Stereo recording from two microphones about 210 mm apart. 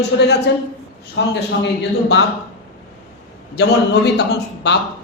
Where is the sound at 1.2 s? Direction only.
55° left (ahead or behind).